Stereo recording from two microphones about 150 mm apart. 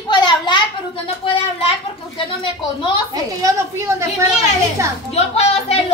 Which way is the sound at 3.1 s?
20° right (ahead or behind).